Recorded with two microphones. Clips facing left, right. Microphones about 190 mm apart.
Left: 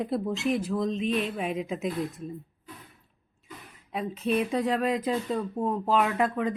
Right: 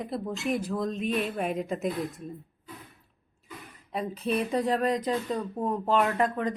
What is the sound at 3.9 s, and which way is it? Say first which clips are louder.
Speech: left 1 dB; centre (ahead or behind).